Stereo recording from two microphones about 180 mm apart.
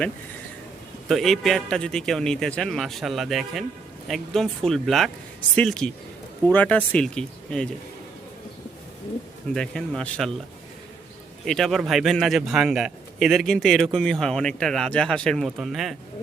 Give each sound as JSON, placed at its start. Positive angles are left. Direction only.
{"t": 1.0, "sound": "a man's voice", "side_deg": 0}
{"t": 9.6, "sound": "a man's voice", "side_deg": 5}
{"t": 11.4, "sound": "a man's voice", "side_deg": 0}